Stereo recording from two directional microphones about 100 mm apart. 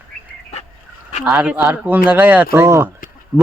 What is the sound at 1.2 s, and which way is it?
Speech, 10° right (ahead or behind).